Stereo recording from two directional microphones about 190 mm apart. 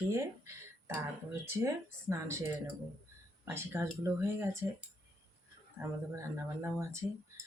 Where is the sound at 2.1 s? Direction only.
15° right (ahead or behind).